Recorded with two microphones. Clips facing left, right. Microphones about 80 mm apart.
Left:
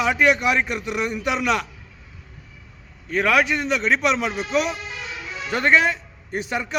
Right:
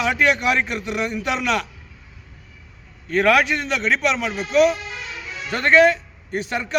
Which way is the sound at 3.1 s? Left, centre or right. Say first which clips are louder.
Right 2 dB; centre.